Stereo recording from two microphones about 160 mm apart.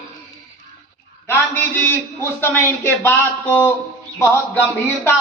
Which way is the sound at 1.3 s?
10° left (ahead or behind).